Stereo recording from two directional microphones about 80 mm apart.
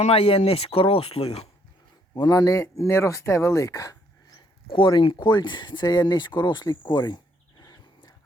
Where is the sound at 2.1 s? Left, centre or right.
Left.